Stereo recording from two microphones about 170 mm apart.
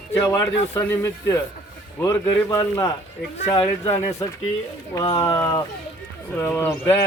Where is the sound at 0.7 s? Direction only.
15° left (ahead or behind).